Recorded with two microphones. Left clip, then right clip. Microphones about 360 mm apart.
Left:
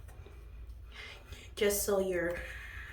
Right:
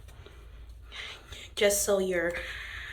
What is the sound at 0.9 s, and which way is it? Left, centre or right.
Speech, centre.